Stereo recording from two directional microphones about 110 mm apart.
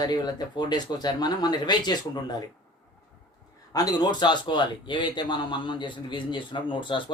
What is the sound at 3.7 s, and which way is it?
Speech, 35° left (ahead or behind).